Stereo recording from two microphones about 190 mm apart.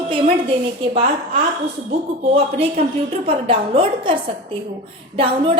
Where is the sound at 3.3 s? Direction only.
30° right (ahead or behind).